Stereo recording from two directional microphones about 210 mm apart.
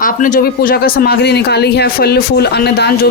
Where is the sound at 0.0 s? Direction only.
40° left (ahead or behind).